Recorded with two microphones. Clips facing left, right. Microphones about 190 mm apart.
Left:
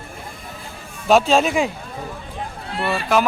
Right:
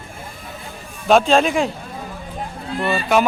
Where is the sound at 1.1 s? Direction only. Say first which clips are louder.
Right 1 dB; 5° left (ahead or behind).